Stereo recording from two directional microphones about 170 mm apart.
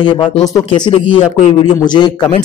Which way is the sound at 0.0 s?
30° left (ahead or behind).